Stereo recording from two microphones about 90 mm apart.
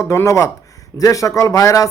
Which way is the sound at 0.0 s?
30° left (ahead or behind).